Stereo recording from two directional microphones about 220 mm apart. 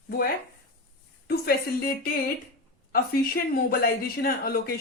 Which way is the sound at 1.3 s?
45° left (ahead or behind).